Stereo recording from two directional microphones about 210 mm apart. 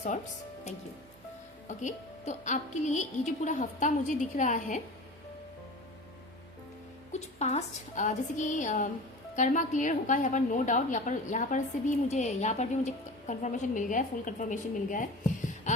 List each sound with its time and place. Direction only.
1.6 s a woman's voice: 35° left (ahead or behind)
7.1 s a woman's voice: 35° left (ahead or behind)
15.7 s heart sounds: 35° left (ahead or behind)